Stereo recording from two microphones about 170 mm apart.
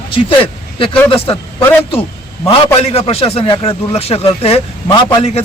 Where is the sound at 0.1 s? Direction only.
30° left (ahead or behind).